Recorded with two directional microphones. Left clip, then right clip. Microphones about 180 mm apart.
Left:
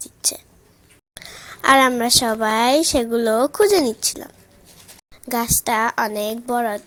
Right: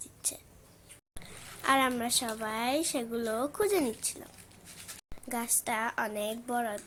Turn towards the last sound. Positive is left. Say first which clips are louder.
# left 12 dB
turn(degrees=30)  # may be behind; listen again after turning